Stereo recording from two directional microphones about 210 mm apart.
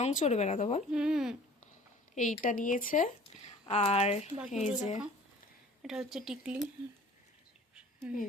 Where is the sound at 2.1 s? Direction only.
35° left (ahead or behind).